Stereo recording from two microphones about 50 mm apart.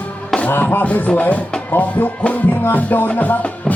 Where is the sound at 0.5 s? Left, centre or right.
Left.